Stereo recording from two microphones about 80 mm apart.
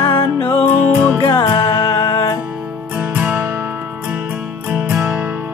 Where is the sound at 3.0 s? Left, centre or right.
Right.